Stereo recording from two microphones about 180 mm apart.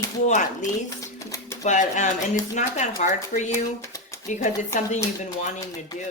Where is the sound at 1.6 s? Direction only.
40° left (ahead or behind).